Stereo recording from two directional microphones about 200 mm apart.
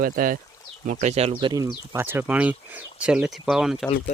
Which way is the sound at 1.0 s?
30° right (ahead or behind).